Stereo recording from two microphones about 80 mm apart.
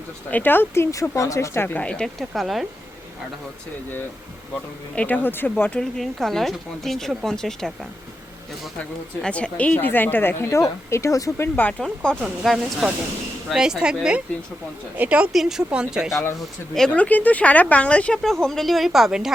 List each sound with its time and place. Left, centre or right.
0.3 s speech: left
1.6 s speech: left
1.9 s speech: centre
2.3 s speech: centre
4.9 s speech: left
5.8 s speech: centre
9.2 s speech: centre
10.5 s speech: left
11.3 s speech: left
12.2 s speech: centre
15.3 s speech: centre
16.9 s speech: centre